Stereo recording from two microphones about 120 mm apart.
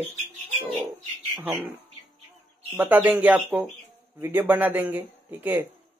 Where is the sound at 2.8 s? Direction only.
15° right (ahead or behind).